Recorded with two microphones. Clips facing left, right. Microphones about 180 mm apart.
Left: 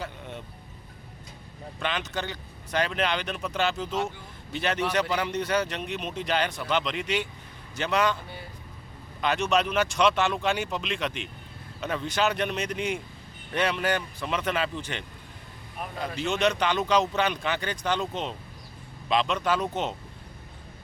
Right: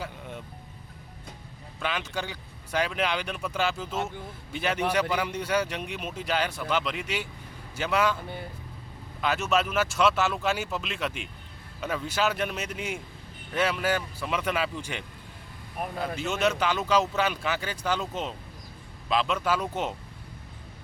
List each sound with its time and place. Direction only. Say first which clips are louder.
0.0 s vehicle: left 1 dB; 10° right (ahead or behind)
1.8 s speech: left 1 dB; 10° right (ahead or behind)
9.2 s speech: left 1 dB; 5° right (ahead or behind)
16.2 s speech: left 2 dB; 5° right (ahead or behind)